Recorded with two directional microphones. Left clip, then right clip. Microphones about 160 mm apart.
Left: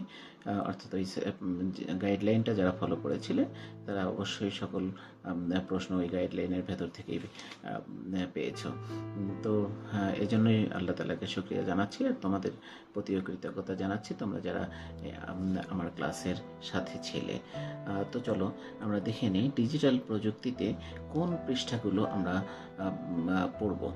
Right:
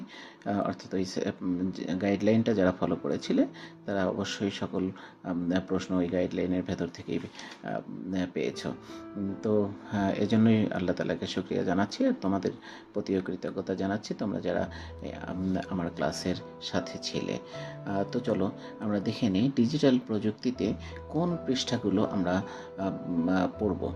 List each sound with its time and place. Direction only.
0.4 s speech: 20° right (ahead or behind)